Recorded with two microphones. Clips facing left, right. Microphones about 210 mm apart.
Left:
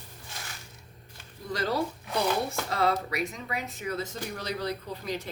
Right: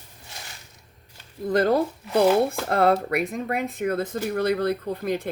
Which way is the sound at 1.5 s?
55° right (ahead or behind).